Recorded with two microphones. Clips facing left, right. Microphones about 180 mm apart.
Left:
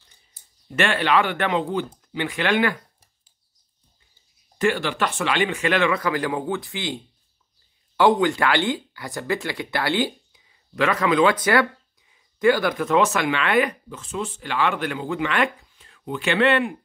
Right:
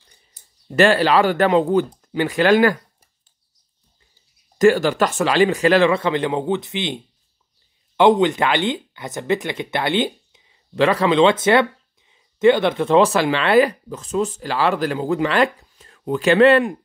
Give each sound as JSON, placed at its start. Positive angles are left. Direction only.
{"t": 0.7, "sound": "speech", "side_deg": -35}
{"t": 4.6, "sound": "speech", "side_deg": -40}
{"t": 8.0, "sound": "speech", "side_deg": -20}